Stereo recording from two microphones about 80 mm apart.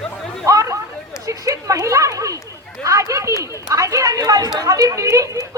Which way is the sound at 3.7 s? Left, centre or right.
Right.